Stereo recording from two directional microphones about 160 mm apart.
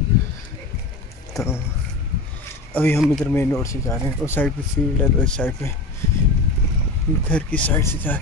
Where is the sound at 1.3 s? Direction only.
20° left (ahead or behind).